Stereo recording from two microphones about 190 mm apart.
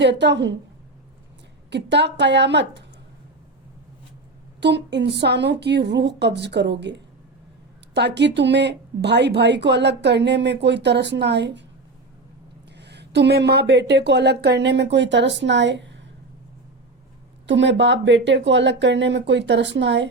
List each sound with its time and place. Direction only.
0.0 s speech: 65° right (ahead or behind)
1.7 s speech: 65° right (ahead or behind)
4.6 s speech: 65° right (ahead or behind)
12.7 s speech: 65° right (ahead or behind)
17.4 s speech: 70° right (ahead or behind)